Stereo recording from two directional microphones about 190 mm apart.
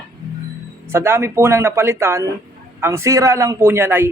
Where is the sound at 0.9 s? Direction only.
10° right (ahead or behind).